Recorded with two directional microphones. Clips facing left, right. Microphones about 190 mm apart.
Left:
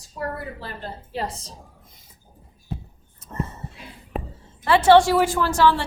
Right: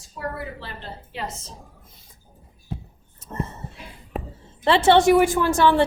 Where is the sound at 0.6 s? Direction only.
40° left (ahead or behind).